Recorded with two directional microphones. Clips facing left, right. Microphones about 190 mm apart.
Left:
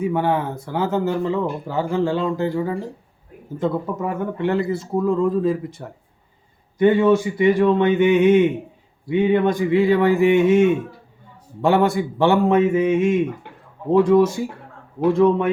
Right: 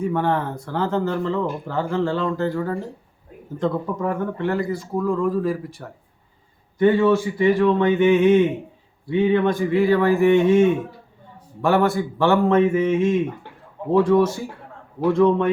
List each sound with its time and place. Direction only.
0.0 s speech: 10° left (ahead or behind)
4.4 s speech: 25° left (ahead or behind)
11.6 s speech: 15° left (ahead or behind)